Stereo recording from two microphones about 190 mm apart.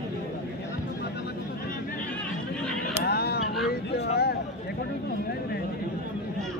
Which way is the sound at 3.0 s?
55° left (ahead or behind).